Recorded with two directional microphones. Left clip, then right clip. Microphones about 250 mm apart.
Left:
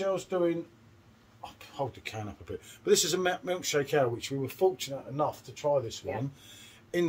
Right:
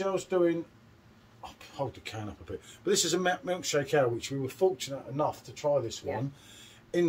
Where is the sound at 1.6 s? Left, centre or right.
Centre.